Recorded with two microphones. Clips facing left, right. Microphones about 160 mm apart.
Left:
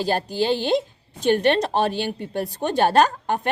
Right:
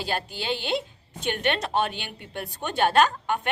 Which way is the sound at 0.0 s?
40° left (ahead or behind).